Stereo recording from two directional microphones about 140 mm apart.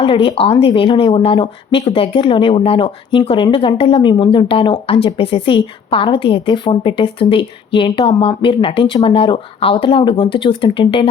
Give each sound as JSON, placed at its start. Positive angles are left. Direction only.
{"t": 0.0, "sound": "speech", "side_deg": 40}